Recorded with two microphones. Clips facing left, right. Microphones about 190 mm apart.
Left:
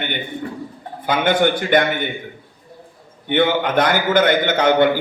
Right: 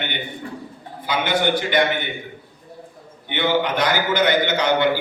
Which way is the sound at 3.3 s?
50° left (ahead or behind).